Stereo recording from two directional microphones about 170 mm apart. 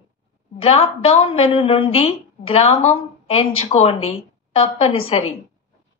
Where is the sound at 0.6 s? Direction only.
35° left (ahead or behind).